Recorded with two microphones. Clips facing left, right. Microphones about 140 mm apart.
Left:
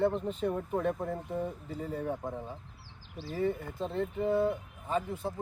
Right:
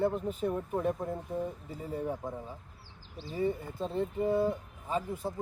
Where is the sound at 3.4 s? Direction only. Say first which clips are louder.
Even; 15° right (ahead or behind).